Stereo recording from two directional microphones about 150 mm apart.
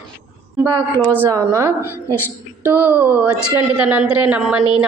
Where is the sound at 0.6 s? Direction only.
15° right (ahead or behind).